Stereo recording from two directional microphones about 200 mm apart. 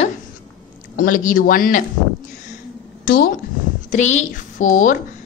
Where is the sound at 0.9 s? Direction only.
45° left (ahead or behind).